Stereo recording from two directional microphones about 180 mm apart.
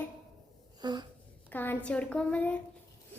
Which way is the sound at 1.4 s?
10° left (ahead or behind).